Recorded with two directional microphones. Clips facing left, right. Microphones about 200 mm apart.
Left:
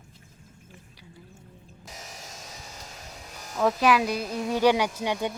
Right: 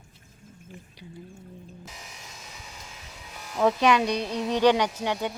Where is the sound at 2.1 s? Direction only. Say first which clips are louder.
Left 2 dB; 40° left (ahead or behind).